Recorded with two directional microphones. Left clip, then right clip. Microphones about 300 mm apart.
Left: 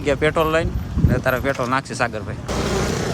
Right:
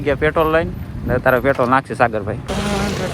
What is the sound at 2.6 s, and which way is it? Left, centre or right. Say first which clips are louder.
Vehicle: even; left.